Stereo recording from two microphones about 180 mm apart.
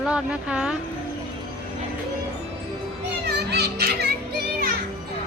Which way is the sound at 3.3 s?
65° right (ahead or behind).